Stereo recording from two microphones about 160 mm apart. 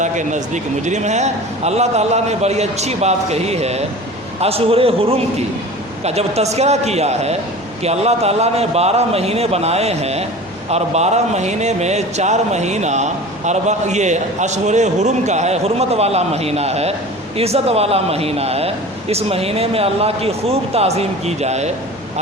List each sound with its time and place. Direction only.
0.0 s a man's voice: 50° right (ahead or behind)